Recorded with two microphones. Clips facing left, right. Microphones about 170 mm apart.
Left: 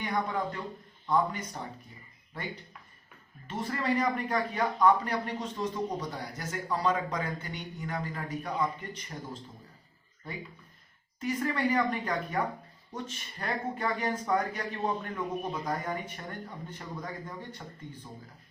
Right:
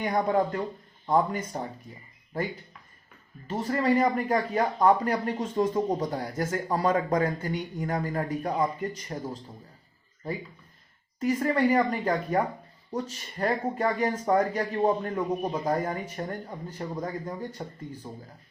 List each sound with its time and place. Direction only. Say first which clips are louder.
0.0 s speech: right 7 dB; 40° right (ahead or behind)
3.4 s speech: right 6 dB; 35° right (ahead or behind)
11.2 s speech: right 6 dB; 40° right (ahead or behind)